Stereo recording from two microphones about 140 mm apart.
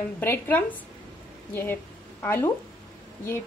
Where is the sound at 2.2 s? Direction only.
20° left (ahead or behind).